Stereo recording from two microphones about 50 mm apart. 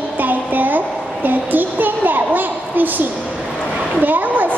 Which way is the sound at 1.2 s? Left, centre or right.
Right.